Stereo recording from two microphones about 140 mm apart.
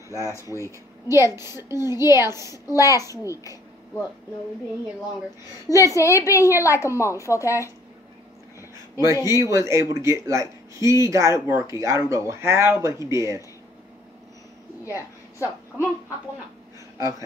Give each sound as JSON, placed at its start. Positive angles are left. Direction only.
{"t": 0.1, "sound": "a woman's voice", "side_deg": 20}
{"t": 0.7, "sound": "speech", "side_deg": -20}
{"t": 2.5, "sound": "a woman's voice", "side_deg": 25}
{"t": 5.7, "sound": "a woman's voice", "side_deg": 25}
{"t": 8.9, "sound": "speech", "side_deg": -20}
{"t": 14.9, "sound": "a woman's voice", "side_deg": 20}